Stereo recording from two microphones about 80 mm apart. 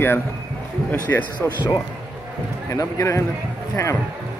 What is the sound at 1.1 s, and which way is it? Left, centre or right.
Speech, left.